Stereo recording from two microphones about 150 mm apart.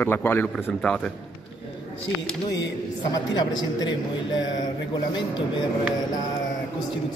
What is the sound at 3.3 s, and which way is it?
Speech, 30° left (ahead or behind).